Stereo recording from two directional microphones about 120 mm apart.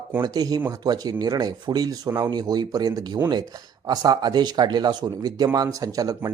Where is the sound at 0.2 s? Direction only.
30° right (ahead or behind).